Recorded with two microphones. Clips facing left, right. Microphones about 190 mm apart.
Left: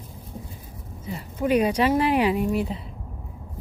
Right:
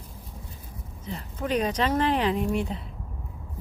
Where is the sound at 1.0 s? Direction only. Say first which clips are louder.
Left 6 dB; 10° left (ahead or behind).